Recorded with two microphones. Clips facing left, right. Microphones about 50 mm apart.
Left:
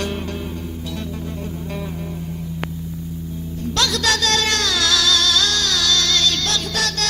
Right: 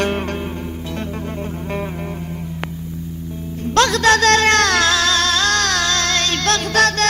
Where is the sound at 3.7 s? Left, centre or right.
Right.